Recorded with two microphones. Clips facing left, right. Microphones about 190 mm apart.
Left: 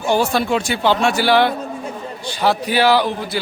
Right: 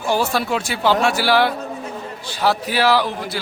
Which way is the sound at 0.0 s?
Centre (ahead or behind).